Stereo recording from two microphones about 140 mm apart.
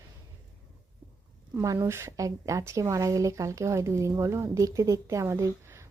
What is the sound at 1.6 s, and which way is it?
A woman's voice, 20° right (ahead or behind).